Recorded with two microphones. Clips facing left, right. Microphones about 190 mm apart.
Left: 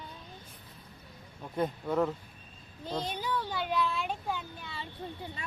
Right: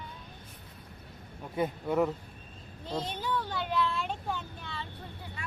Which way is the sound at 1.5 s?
10° right (ahead or behind).